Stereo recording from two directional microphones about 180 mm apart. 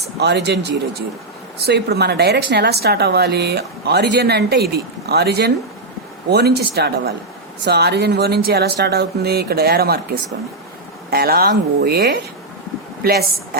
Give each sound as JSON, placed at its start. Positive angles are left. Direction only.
{"t": 0.2, "sound": "speech", "side_deg": -70}
{"t": 11.1, "sound": "a woman's voice", "side_deg": -60}